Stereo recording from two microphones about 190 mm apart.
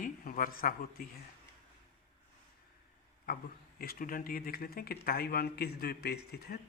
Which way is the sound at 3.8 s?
50° left (ahead or behind).